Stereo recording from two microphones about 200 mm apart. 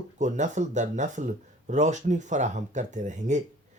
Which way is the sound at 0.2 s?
35° right (ahead or behind).